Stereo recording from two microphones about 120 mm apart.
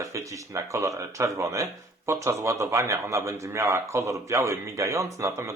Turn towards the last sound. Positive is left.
turn(degrees=-25)  # may be behind; listen again after turning